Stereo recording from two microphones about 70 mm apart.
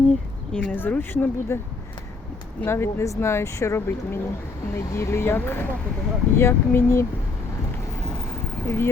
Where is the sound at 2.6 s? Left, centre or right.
Left.